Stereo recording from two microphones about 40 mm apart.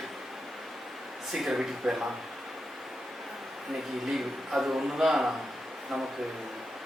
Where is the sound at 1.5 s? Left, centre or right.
Centre.